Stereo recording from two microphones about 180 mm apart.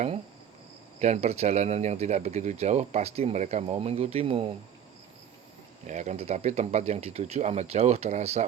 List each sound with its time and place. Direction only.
0.9 s speech: 40° right (ahead or behind)
5.8 s speech: 40° right (ahead or behind)